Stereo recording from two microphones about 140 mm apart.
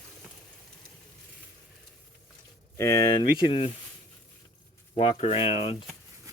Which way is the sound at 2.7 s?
25° left (ahead or behind).